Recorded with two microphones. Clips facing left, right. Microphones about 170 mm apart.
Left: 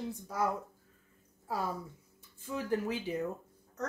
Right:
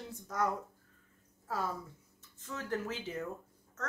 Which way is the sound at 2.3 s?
10° left (ahead or behind).